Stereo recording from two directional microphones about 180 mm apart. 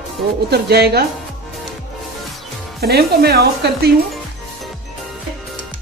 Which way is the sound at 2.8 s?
60° right (ahead or behind).